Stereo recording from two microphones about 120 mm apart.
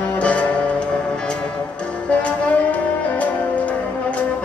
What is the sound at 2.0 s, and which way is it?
Music, 10° left (ahead or behind).